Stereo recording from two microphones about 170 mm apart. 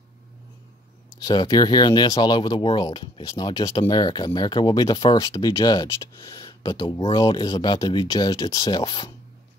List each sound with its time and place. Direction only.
1.2 s speech: 25° left (ahead or behind)